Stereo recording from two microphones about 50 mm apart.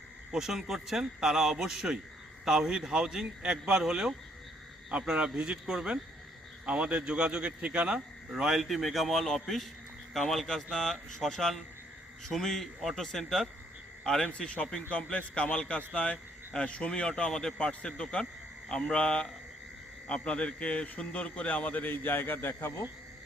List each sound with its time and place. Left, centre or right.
0.3 s a man's voice: centre
8.3 s a man's voice: centre
14.3 s a man's voice: left
15.9 s a sound: left
16.6 s a man's voice: left